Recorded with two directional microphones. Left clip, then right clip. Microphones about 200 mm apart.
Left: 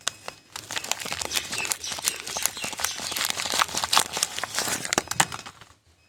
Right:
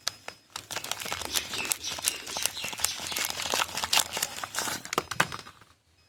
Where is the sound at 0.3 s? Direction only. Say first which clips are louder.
Left 3 dB; 5° right (ahead or behind).